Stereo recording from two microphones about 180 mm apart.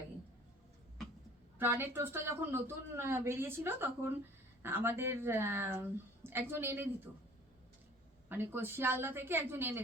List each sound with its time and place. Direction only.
1.5 s a woman's voice: 10° right (ahead or behind)
8.3 s a woman's voice: 10° right (ahead or behind)